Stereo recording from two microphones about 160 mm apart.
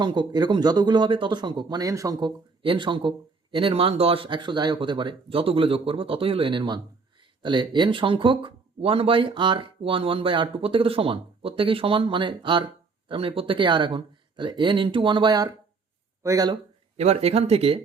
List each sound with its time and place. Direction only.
0.0 s speech: 30° right (ahead or behind)
17.0 s speech: 40° right (ahead or behind)